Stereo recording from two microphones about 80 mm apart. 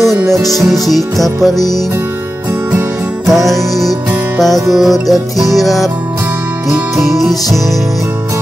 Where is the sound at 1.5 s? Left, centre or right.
Left.